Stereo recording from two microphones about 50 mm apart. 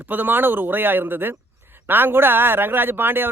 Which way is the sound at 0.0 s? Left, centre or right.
Right.